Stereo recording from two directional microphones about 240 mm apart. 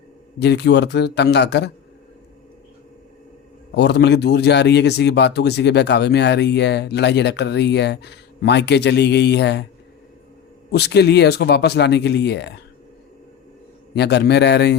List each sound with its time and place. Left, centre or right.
0.3 s speech: left
3.8 s speech: left
10.7 s speech: left
13.9 s speech: left